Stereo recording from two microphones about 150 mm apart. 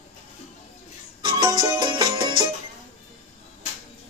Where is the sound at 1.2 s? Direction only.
30° right (ahead or behind).